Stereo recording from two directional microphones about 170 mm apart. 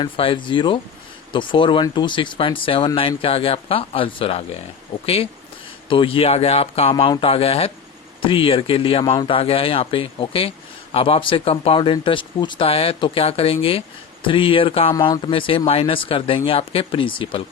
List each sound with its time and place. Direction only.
0.0 s speech: 30° left (ahead or behind)